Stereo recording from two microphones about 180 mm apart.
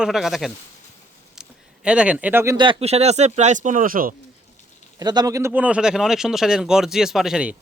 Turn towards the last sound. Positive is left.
turn(degrees=-5)  # may be behind; listen again after turning